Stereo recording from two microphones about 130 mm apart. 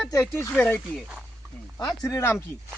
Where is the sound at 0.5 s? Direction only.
10° left (ahead or behind).